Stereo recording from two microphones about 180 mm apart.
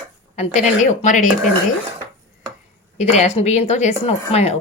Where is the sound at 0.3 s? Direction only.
40° left (ahead or behind).